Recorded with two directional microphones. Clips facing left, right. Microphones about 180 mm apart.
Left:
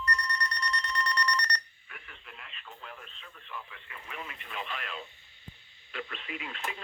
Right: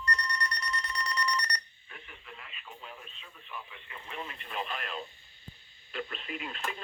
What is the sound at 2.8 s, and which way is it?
Radio, 15° right (ahead or behind).